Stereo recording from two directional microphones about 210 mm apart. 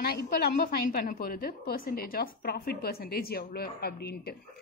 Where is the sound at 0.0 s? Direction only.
45° left (ahead or behind).